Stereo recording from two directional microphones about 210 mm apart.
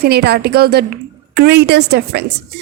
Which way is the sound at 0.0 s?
50° right (ahead or behind).